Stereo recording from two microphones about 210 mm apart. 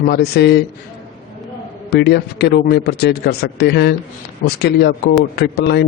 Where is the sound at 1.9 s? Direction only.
50° left (ahead or behind).